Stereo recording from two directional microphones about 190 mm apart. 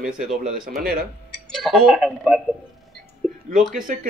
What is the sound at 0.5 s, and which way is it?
Speech, 50° right (ahead or behind).